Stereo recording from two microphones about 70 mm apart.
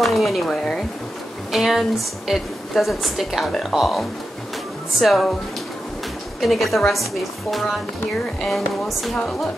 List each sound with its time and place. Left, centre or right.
0.0 s a woman's voice: centre
6.4 s a woman's voice: centre
8.5 s a woman's voice: centre